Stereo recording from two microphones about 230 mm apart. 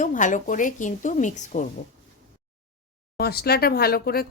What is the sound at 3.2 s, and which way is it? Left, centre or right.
Speech, left.